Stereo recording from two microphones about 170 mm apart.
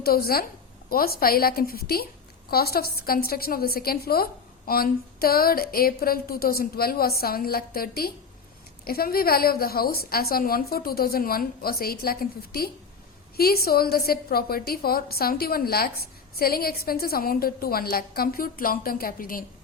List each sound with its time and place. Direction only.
0.0 s a woman's voice: 65° left (ahead or behind)